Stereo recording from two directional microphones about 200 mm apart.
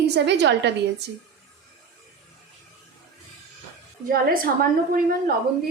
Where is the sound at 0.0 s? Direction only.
60° right (ahead or behind).